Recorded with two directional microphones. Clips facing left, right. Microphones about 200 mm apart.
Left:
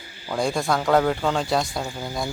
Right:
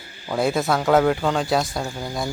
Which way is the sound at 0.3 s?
5° right (ahead or behind).